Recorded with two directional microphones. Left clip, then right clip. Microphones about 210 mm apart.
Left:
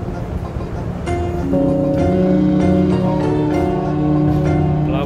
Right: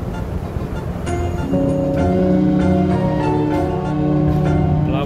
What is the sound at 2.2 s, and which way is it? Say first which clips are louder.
Music: left 1 dB; 25° left (ahead or behind).